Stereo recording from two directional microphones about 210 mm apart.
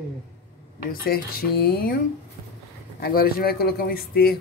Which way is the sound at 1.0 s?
45° left (ahead or behind).